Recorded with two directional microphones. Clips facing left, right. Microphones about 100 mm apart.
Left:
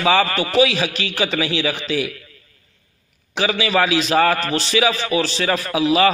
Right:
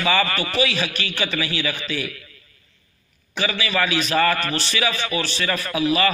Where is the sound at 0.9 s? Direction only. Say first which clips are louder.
Left 4 dB; 90° left.